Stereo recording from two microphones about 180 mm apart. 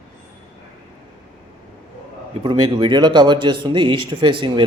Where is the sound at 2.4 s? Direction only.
25° right (ahead or behind).